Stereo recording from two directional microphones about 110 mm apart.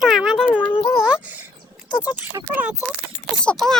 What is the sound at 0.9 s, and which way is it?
Speech, 10° right (ahead or behind).